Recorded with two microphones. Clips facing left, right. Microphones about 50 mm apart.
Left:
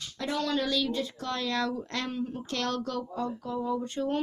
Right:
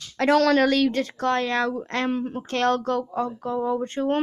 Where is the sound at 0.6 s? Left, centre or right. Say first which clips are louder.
Right 8 dB; right.